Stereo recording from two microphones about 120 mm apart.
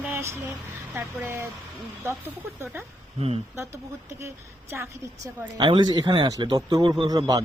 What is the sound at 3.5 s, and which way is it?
Speech, 25° right (ahead or behind).